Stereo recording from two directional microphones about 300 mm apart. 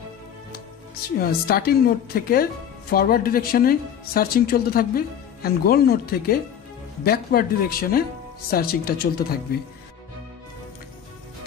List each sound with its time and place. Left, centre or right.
1.0 s speech: left